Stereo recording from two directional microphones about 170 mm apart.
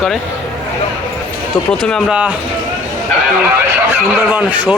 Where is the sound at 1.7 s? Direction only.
5° left (ahead or behind).